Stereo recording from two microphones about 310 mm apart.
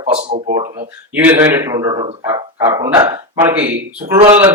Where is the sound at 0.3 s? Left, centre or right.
Right.